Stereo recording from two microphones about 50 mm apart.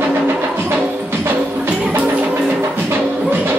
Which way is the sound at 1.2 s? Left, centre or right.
Right.